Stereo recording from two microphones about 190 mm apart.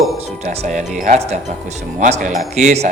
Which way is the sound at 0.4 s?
35° right (ahead or behind).